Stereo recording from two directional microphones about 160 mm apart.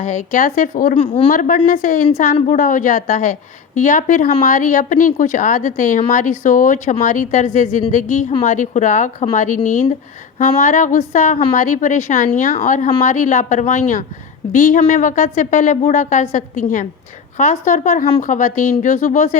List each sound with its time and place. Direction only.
0.0 s speech: 50° left (ahead or behind)
0.9 s a woman's voice: 40° left (ahead or behind)
1.3 s a woman's voice: 55° left (ahead or behind)